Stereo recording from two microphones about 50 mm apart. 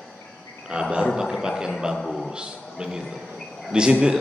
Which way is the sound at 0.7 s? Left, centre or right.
Centre.